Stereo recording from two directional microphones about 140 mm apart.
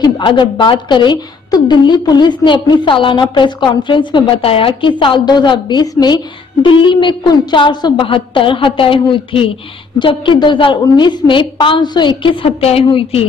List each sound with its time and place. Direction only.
0.0 s a woman's voice: 35° left (ahead or behind)